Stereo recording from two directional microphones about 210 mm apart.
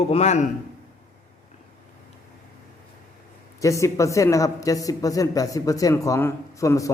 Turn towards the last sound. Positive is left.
turn(degrees=15)  # may be behind; listen again after turning